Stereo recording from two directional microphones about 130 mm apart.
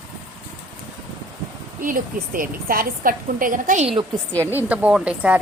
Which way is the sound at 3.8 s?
45° right (ahead or behind).